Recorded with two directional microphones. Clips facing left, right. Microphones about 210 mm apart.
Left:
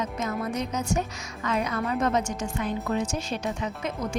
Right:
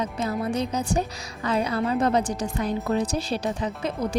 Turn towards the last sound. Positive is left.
turn(degrees=-35)  # may be behind; listen again after turning